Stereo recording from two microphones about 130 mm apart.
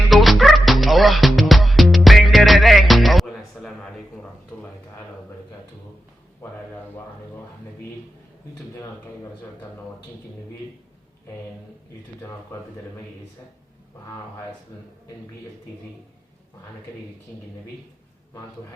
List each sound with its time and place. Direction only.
0.1 s music: centre (ahead or behind)
4.5 s speech: 10° left (ahead or behind)